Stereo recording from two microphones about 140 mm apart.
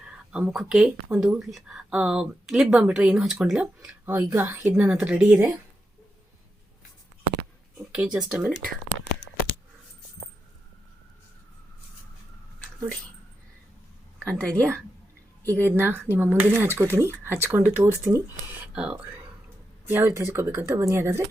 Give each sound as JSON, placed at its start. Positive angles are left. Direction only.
{"t": 0.0, "sound": "speech", "side_deg": -5}
{"t": 7.9, "sound": "speech", "side_deg": -5}
{"t": 14.2, "sound": "speech", "side_deg": 5}
{"t": 15.6, "sound": "speech", "side_deg": -15}